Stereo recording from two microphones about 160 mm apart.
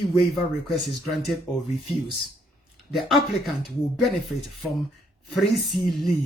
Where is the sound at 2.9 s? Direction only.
Centre (ahead or behind).